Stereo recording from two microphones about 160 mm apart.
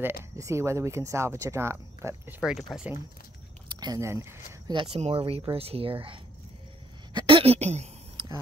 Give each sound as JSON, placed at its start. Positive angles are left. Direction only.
{"t": 0.0, "sound": "speech", "side_deg": -15}
{"t": 2.4, "sound": "speech", "side_deg": -5}
{"t": 3.6, "sound": "speech", "side_deg": -25}
{"t": 4.7, "sound": "speech", "side_deg": -40}
{"t": 7.2, "sound": "a sound", "side_deg": -35}